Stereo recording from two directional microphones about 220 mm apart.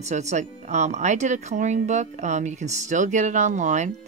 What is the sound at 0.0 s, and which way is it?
Speech, 30° right (ahead or behind).